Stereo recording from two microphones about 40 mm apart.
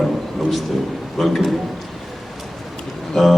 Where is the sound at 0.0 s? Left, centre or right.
Centre.